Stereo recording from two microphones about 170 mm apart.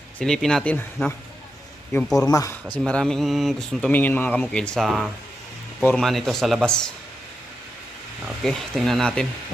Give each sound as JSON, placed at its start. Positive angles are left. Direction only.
{"t": 0.2, "sound": "speech", "side_deg": 5}
{"t": 2.2, "sound": "speech", "side_deg": 20}
{"t": 2.7, "sound": "speech", "side_deg": 5}
{"t": 8.4, "sound": "speech", "side_deg": 0}